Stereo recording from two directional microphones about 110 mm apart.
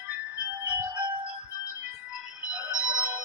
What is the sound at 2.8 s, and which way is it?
Music, 15° right (ahead or behind).